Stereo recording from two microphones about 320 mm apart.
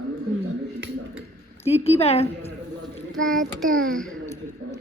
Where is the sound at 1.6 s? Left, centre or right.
Centre.